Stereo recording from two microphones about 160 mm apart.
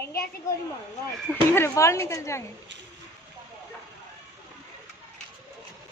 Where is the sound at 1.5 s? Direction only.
15° left (ahead or behind).